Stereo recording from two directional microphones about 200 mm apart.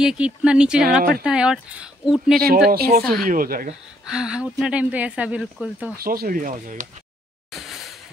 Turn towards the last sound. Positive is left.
turn(degrees=-40)  # may be behind; listen again after turning